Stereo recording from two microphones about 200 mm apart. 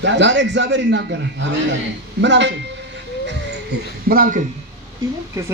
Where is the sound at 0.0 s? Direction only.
65° right (ahead or behind).